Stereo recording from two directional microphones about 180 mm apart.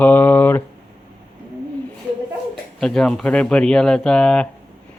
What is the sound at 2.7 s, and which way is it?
Speech, 5° left (ahead or behind).